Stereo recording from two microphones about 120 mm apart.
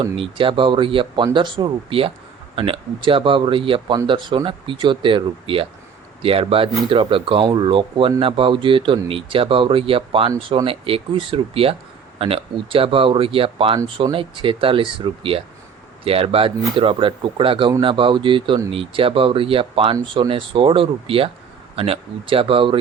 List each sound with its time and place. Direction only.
0.2 s speech: 45° right (ahead or behind)